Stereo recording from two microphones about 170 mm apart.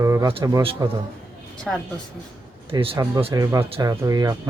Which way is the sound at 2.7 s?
30° right (ahead or behind).